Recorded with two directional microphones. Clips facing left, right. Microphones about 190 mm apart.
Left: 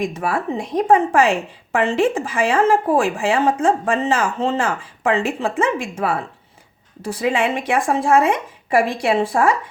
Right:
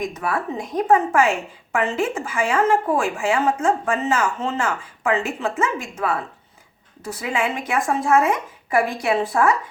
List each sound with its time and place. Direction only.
0.0 s a woman's voice: 30° left (ahead or behind)
7.0 s a woman's voice: 30° left (ahead or behind)